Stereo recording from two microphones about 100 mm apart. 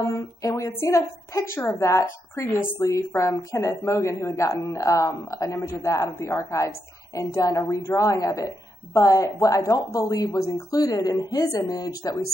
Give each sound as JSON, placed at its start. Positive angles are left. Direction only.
{"t": 0.4, "sound": "a woman's voice", "side_deg": 35}